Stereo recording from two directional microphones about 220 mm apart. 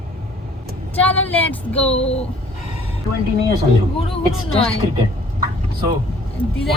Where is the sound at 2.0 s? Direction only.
30° left (ahead or behind).